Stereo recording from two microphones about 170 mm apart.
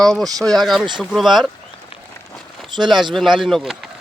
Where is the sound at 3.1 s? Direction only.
Centre (ahead or behind).